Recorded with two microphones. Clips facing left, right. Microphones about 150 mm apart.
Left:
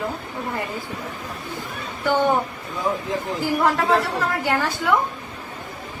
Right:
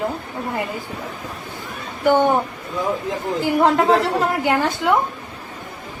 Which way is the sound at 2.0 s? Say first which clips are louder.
Right 4 dB; 15° right (ahead or behind).